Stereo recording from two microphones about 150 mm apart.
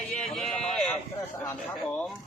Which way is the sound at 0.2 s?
5° left (ahead or behind).